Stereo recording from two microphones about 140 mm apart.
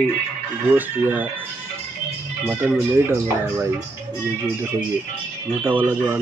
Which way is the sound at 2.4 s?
15° right (ahead or behind).